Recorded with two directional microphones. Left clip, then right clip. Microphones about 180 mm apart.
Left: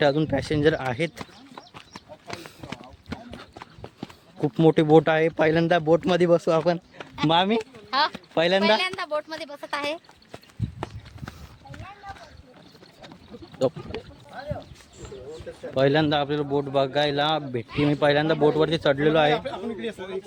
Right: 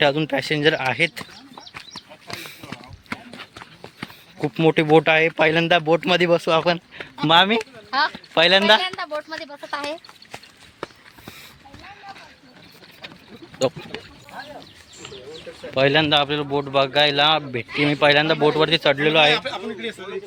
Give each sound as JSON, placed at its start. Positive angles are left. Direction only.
{"t": 0.0, "sound": "speech", "side_deg": 25}
{"t": 2.3, "sound": "run", "side_deg": -20}
{"t": 4.4, "sound": "speech", "side_deg": 25}
{"t": 7.3, "sound": "a man's voice", "side_deg": 5}
{"t": 7.6, "sound": "a sound", "side_deg": 35}
{"t": 8.1, "sound": "speech", "side_deg": 10}
{"t": 8.8, "sound": "speech", "side_deg": 30}
{"t": 15.7, "sound": "a man's voice", "side_deg": 20}
{"t": 19.4, "sound": "a man's voice", "side_deg": 65}